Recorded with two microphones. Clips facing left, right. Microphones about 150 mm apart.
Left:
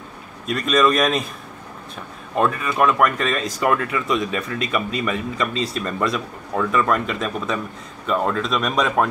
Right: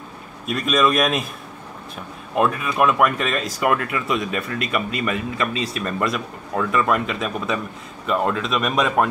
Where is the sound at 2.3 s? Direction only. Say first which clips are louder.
Even; 5° right (ahead or behind).